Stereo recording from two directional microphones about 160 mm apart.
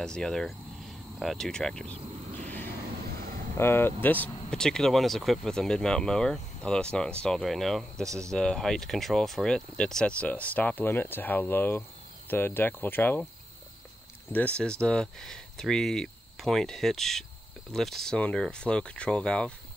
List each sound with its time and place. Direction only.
0.0 s speech: 5° left (ahead or behind)
2.0 s a sound: 45° right (ahead or behind)
2.6 s vehicle: 75° right (ahead or behind)
3.5 s speech: 15° left (ahead or behind)
14.3 s speech: 10° left (ahead or behind)